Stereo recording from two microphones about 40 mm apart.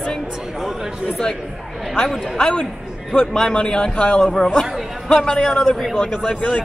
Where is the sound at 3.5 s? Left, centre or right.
Left.